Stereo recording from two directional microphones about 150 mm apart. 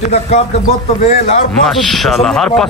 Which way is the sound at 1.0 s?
45° left (ahead or behind).